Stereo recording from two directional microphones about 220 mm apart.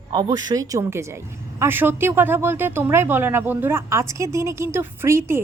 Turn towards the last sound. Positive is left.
turn(degrees=-10)  # may be behind; listen again after turning